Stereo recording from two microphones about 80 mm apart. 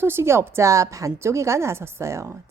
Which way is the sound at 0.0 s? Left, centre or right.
Right.